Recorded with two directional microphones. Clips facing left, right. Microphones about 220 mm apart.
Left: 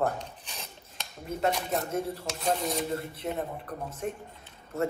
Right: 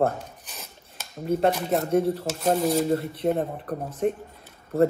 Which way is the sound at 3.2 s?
50° right (ahead or behind).